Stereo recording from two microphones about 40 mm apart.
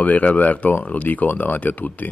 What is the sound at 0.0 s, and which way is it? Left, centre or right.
Speech, left.